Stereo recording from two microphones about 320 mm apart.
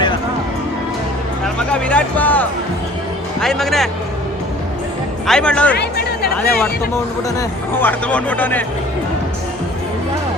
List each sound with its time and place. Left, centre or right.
1.5 s speech: centre
5.2 s speech: centre
5.7 s speech: left
7.3 s speech: centre